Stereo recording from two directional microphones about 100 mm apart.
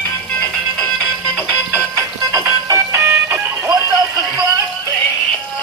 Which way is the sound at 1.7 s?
30° right (ahead or behind).